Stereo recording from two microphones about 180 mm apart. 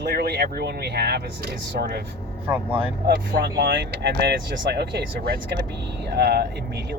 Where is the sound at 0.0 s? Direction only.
60° right (ahead or behind).